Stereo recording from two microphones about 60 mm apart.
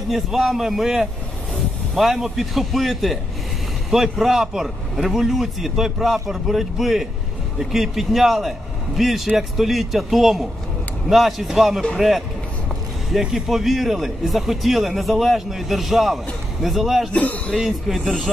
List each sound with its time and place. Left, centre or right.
0.1 s speech: centre
17.1 s speech: left
17.6 s speech: centre